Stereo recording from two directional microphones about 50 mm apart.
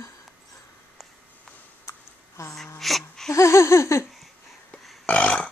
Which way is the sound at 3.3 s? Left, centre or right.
Left.